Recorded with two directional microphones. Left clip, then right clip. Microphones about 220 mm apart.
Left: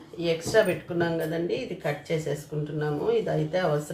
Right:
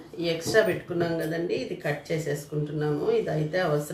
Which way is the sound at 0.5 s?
20° left (ahead or behind).